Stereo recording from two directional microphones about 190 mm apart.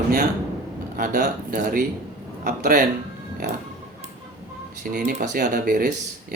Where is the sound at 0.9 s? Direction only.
45° right (ahead or behind).